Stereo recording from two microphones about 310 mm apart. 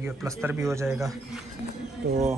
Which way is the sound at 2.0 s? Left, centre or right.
Right.